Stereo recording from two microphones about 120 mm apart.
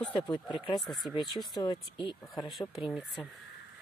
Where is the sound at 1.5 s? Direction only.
40° left (ahead or behind).